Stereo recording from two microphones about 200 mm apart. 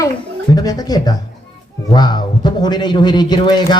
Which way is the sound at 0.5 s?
20° left (ahead or behind).